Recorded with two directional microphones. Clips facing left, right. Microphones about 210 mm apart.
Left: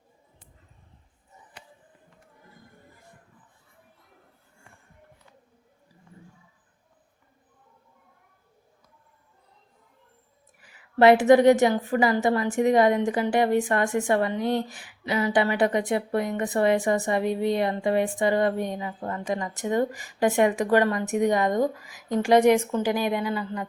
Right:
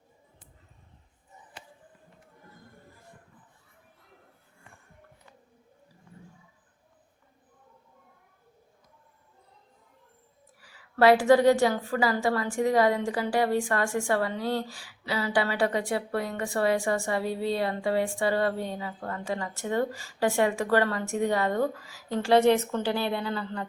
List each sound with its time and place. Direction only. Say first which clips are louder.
10.6 s a woman's voice: left 3 dB; 20° left (ahead or behind)